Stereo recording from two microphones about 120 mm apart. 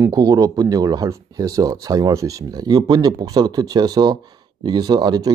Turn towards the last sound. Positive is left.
turn(degrees=-35)  # may be behind; listen again after turning